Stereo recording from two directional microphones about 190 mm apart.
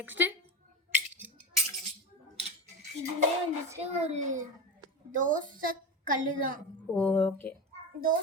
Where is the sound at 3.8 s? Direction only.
35° right (ahead or behind).